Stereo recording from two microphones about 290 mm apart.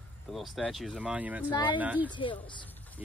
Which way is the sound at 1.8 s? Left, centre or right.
Centre.